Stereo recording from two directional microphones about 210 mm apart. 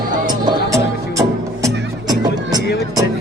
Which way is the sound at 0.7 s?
15° right (ahead or behind).